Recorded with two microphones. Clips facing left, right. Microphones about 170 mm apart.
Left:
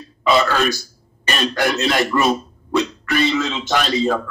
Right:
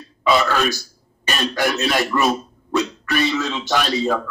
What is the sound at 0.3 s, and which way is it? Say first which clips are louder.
Speech: left 1 dB; 20° left (ahead or behind).